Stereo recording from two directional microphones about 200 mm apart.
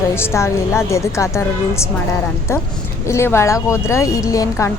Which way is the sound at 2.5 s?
15° left (ahead or behind).